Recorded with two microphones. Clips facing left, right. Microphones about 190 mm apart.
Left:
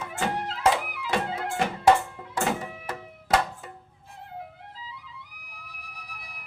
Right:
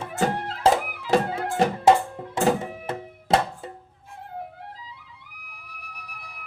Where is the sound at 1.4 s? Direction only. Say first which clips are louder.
Right 5 dB; 40° right (ahead or behind).